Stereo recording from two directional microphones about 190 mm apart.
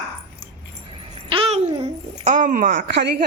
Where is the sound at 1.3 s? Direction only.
30° right (ahead or behind).